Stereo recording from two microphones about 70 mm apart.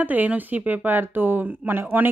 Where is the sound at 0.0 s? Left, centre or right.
Right.